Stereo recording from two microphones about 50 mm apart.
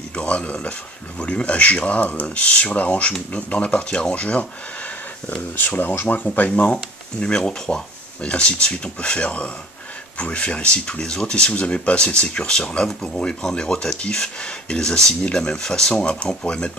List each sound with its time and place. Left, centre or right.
0.1 s speech: left
5.6 s speech: left; by 16.7 s centre